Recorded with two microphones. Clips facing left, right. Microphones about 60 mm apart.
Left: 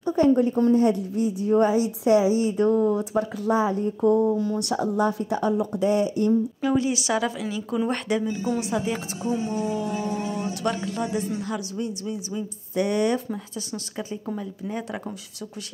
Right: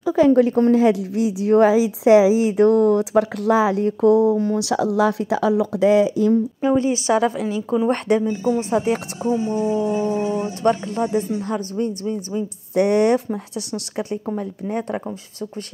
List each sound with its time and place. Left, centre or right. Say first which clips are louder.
0.0 s a woman's voice: right 5 dB; right
6.6 s a woman's voice: right 5 dB; right
9.5 s speech: right 6 dB; right
12.7 s a woman's voice: right 7 dB; right